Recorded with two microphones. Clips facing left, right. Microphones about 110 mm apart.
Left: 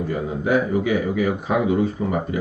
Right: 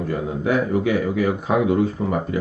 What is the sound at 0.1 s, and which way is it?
Speech, 60° right (ahead or behind).